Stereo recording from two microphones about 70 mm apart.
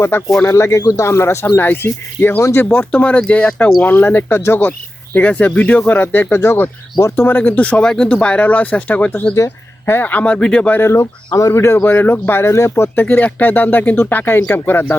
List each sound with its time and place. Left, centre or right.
0.1 s speech: left
1.1 s speech: left
2.6 s speech: centre
5.1 s speech: left
9.3 s speech: left
9.9 s speech: left
10.8 s speech: left
11.3 s speech: left
11.5 s speech: left
12.4 s speech: left